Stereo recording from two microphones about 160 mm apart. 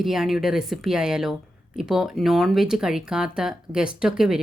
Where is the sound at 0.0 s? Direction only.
Centre (ahead or behind).